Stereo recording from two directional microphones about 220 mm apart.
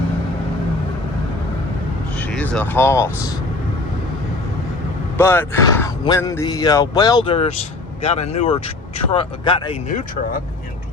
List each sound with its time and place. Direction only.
2.1 s speech: 5° left (ahead or behind)
5.1 s speech: 10° left (ahead or behind)